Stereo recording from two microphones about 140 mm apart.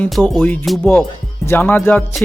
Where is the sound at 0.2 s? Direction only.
Centre (ahead or behind).